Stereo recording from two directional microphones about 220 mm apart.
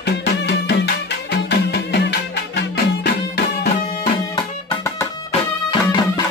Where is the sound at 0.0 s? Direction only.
50° left (ahead or behind).